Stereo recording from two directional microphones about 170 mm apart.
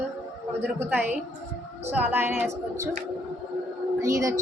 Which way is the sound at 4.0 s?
20° right (ahead or behind).